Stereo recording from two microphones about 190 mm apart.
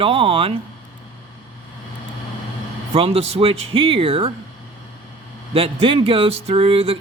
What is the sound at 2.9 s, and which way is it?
Speech, 30° right (ahead or behind).